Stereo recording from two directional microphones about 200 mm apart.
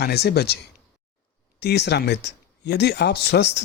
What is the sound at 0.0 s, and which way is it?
Speech, 55° left (ahead or behind).